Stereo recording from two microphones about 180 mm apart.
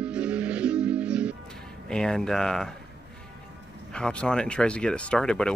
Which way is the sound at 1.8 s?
5° left (ahead or behind).